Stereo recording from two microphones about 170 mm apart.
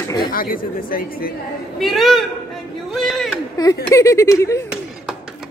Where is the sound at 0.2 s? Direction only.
60° left (ahead or behind).